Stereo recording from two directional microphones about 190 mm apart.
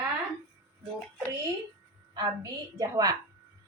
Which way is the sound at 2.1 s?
20° right (ahead or behind).